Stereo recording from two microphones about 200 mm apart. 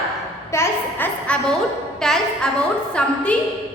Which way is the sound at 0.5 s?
10° left (ahead or behind).